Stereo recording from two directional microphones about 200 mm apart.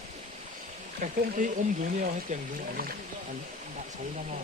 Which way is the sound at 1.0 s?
45° right (ahead or behind).